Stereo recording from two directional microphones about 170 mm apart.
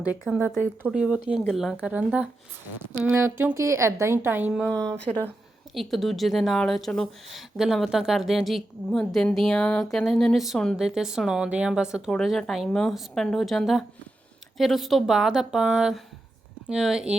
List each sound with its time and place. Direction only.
0.3 s speech: 5° right (ahead or behind)
3.2 s speech: 15° right (ahead or behind)
4.5 s speech: 5° left (ahead or behind)